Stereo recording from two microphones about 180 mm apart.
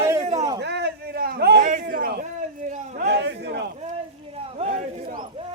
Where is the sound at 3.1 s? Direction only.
70° right (ahead or behind).